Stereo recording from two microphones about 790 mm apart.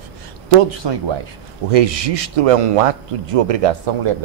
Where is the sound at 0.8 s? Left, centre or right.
Right.